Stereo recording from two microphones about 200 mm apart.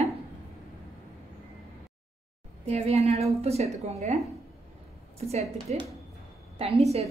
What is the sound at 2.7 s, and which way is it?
A woman's voice, 30° right (ahead or behind).